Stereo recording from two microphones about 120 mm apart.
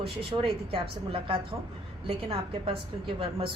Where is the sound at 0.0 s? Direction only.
50° right (ahead or behind).